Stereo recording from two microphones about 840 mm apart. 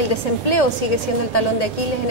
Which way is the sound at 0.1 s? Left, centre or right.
Left.